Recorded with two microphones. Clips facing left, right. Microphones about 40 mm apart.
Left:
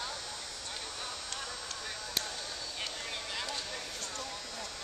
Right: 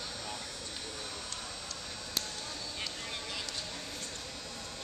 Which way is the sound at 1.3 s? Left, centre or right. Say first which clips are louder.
Left 2 dB; left.